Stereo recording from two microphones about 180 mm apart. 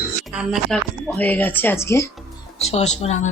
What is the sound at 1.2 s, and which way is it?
Speech, 10° left (ahead or behind).